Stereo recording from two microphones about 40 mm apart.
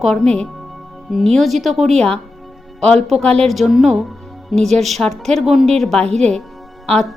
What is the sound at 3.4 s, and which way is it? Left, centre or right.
Speech, centre.